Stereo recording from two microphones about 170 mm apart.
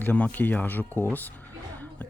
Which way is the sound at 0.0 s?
10° left (ahead or behind).